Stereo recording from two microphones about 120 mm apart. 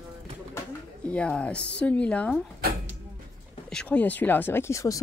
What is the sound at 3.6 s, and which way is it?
Speech, 10° left (ahead or behind).